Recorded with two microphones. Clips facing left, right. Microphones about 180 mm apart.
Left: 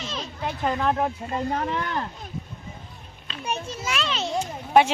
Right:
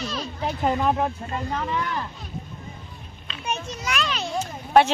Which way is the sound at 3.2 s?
35° left (ahead or behind).